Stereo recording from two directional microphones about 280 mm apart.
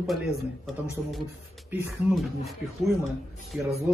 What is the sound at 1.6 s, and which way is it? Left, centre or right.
Speech, centre.